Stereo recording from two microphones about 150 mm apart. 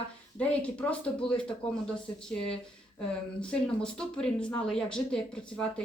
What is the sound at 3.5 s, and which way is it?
Speech, 5° left (ahead or behind).